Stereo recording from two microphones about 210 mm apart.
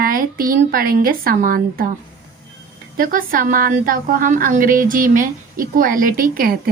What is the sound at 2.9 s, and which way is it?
A woman's voice, 40° right (ahead or behind).